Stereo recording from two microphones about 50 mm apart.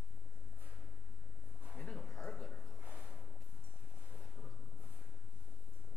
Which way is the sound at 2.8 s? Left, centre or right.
Right.